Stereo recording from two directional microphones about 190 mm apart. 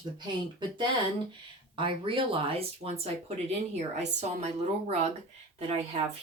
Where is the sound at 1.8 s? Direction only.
25° right (ahead or behind).